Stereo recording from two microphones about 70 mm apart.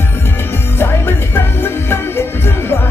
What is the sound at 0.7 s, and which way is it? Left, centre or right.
Music, left.